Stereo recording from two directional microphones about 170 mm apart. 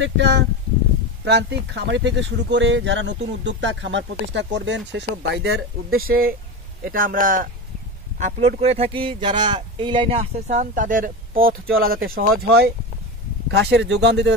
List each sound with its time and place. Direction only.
0.0 s speech: 90° right; by 7.4 s 55° right (ahead or behind)
8.2 s speech: 40° right (ahead or behind); by 12.7 s 65° right (ahead or behind)
13.5 s speech: 85° right